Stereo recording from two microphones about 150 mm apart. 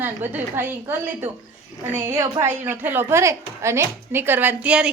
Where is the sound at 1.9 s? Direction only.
20° right (ahead or behind).